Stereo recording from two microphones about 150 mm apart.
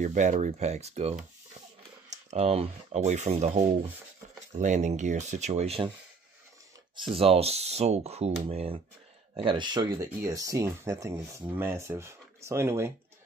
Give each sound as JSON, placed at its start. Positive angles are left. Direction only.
{"t": 0.0, "sound": "speech", "side_deg": -55}
{"t": 7.0, "sound": "speech", "side_deg": -40}